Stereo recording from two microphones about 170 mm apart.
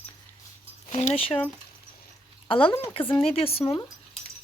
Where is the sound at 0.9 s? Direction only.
40° left (ahead or behind).